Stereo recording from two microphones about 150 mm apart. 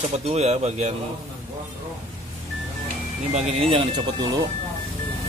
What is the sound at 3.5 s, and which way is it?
Speech, 40° right (ahead or behind).